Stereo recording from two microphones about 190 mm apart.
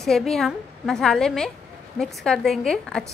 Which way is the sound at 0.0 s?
Centre (ahead or behind).